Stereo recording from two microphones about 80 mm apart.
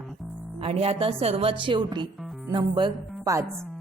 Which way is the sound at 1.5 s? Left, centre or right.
Right.